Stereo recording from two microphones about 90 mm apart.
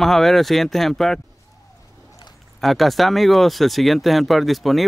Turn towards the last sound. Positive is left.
turn(degrees=0)  # may be behind; listen again after turning